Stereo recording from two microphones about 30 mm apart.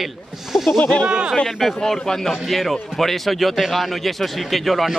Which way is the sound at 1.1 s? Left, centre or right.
Right.